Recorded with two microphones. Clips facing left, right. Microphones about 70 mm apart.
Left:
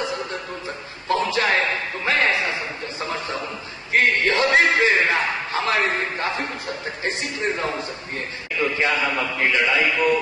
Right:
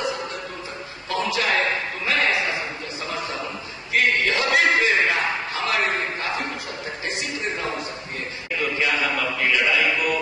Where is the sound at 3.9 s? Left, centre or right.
Left.